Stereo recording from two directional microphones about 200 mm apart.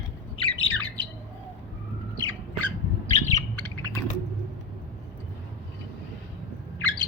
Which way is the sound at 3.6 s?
15° left (ahead or behind).